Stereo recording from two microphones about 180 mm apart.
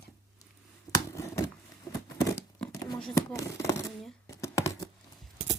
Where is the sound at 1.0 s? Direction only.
15° left (ahead or behind).